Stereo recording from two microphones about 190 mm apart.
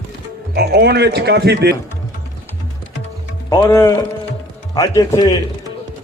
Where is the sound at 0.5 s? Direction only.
55° right (ahead or behind).